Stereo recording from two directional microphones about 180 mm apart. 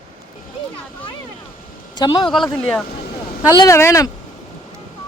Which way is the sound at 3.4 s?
15° left (ahead or behind).